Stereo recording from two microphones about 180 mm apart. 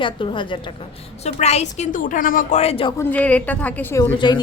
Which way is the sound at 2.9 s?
10° left (ahead or behind).